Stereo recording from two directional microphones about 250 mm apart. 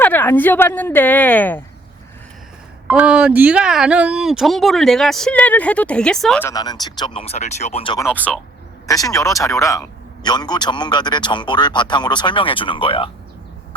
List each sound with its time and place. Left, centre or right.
0.0 s speech: centre
2.8 s speech: centre
6.5 s speech: centre
8.0 s speech: centre; by 13.1 s left